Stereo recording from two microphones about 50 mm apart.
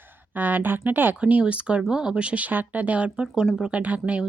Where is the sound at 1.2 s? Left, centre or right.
Right.